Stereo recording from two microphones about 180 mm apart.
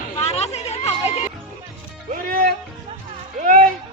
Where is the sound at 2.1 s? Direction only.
50° right (ahead or behind).